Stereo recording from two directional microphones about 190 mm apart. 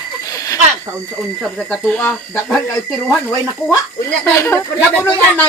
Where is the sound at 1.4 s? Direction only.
5° left (ahead or behind).